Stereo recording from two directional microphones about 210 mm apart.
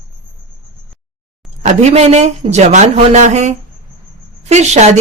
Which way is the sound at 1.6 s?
35° right (ahead or behind).